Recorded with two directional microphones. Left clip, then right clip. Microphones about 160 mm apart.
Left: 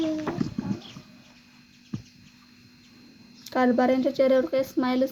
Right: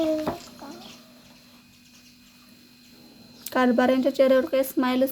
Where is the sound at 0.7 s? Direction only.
90° right.